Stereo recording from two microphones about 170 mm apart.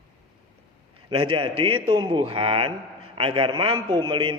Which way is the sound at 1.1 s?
35° right (ahead or behind).